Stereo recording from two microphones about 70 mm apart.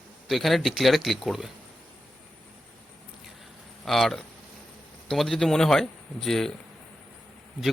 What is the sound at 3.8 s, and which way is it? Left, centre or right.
Speech, centre.